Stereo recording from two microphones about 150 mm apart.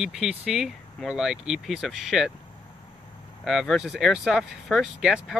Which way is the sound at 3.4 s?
Centre (ahead or behind).